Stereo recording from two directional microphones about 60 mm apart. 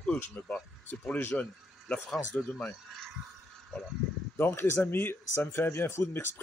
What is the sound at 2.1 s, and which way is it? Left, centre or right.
Speech, centre.